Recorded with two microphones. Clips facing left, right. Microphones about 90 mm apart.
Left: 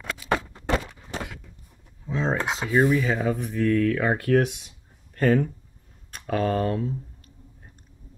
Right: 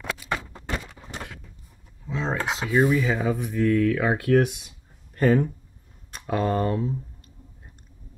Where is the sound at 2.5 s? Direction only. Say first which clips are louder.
Right 1 dB; centre (ahead or behind).